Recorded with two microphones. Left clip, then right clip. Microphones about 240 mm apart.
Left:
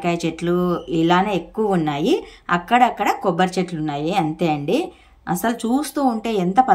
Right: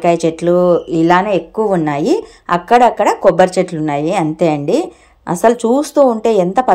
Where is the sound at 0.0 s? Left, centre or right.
Centre.